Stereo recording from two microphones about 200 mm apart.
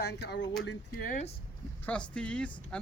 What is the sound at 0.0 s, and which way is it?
Speech, 55° left (ahead or behind).